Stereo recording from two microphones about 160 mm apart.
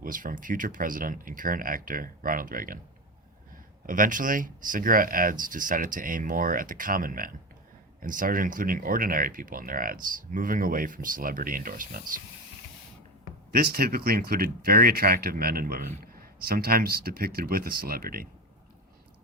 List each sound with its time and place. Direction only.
0.0 s speech: 60° right (ahead or behind)
3.8 s speech: 55° right (ahead or behind)
13.5 s speech: 70° right (ahead or behind)